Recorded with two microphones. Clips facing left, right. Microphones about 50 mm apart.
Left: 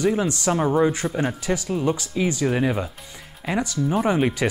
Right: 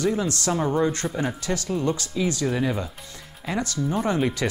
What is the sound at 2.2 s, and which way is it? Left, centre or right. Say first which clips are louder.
Speech: left 3 dB; left.